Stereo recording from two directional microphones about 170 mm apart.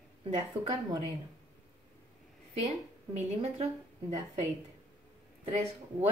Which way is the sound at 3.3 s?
40° right (ahead or behind).